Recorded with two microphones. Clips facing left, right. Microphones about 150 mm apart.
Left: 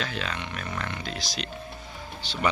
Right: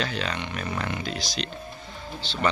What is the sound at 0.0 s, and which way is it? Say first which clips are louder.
Speech: right 3 dB; centre (ahead or behind).